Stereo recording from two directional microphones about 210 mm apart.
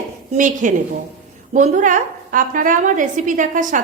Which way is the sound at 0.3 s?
40° right (ahead or behind).